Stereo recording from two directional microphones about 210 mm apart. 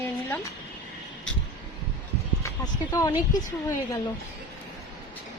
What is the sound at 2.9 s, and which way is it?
Speech, 20° left (ahead or behind).